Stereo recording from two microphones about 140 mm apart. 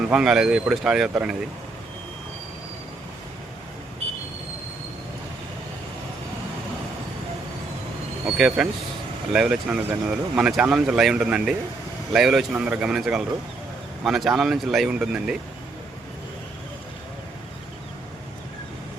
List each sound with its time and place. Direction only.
0.1 s speech: 5° right (ahead or behind)
8.4 s speech: 5° right (ahead or behind)